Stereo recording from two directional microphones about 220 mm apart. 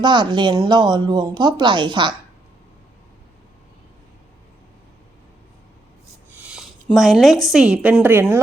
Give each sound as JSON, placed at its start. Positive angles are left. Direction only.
{"t": 0.0, "sound": "speech", "side_deg": -20}
{"t": 6.3, "sound": "a sound", "side_deg": -5}
{"t": 7.4, "sound": "a woman's voice", "side_deg": 0}